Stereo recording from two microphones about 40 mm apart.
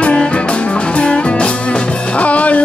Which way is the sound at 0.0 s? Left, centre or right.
Left.